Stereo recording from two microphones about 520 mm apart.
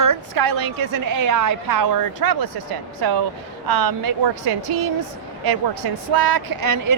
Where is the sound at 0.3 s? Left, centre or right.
Right.